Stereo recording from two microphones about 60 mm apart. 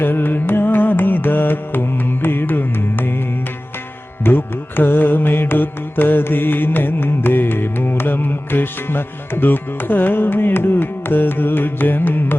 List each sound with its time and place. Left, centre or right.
0.0 s music: left
4.2 s music: left